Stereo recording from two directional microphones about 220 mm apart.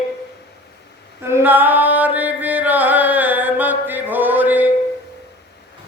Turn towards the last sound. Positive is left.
turn(degrees=-10)  # may be behind; listen again after turning